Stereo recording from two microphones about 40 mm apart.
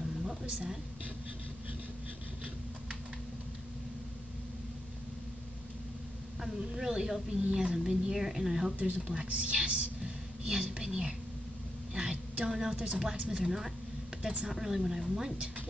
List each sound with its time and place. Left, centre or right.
6.8 s speech: centre
8.7 s speech: right
9.0 s speech: centre
9.3 s whispering: right
11.9 s a sound: centre
12.7 s speech: right
14.5 s speech: centre